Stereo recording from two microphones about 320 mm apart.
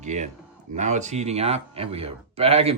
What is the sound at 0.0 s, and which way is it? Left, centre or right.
Speech, right.